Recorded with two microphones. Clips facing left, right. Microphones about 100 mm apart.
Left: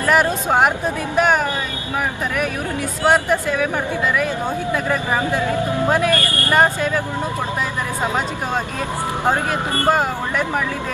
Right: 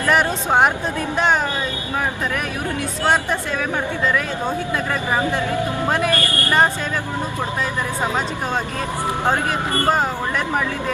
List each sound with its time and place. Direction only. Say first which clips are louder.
0.1 s speech: left 1 dB; 5° left (ahead or behind)
3.1 s speech: left 4 dB; 10° left (ahead or behind)